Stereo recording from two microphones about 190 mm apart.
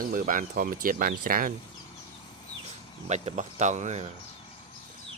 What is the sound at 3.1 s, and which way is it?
Speech, 40° right (ahead or behind).